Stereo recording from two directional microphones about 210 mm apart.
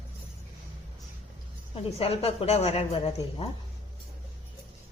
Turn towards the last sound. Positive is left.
turn(degrees=30)  # may be behind; listen again after turning